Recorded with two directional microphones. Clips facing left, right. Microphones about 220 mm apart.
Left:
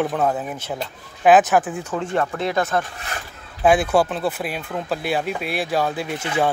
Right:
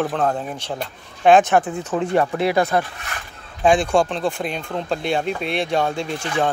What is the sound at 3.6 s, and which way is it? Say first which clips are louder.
Speech: even; 5° left (ahead or behind).